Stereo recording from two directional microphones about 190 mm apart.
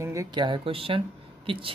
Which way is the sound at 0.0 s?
15° right (ahead or behind).